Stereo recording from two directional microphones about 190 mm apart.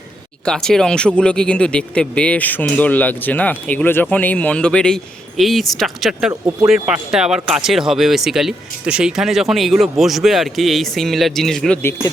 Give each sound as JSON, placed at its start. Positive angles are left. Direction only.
{"t": 0.4, "sound": "speech", "side_deg": 5}